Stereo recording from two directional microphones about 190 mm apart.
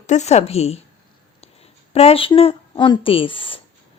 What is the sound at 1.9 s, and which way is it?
Speech, 30° left (ahead or behind).